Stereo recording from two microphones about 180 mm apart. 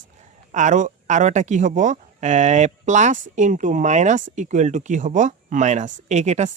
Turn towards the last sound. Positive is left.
turn(degrees=-40)  # may be behind; listen again after turning